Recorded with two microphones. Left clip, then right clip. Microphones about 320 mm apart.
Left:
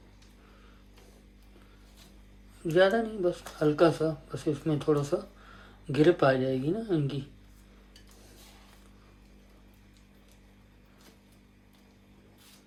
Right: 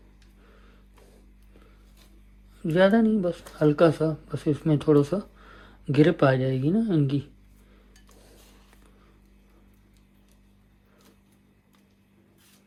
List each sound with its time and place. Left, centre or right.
2.6 s speech: right